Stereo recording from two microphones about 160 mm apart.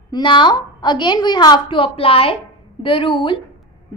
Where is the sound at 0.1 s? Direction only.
30° left (ahead or behind).